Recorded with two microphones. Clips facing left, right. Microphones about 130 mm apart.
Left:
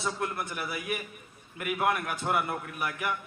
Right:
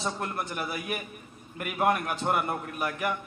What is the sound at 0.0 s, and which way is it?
Speech, 30° right (ahead or behind).